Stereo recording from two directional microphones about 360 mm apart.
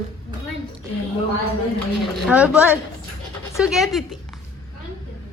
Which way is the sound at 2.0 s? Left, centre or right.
Centre.